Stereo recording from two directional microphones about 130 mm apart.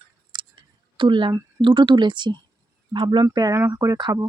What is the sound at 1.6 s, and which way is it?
Speech, 35° right (ahead or behind).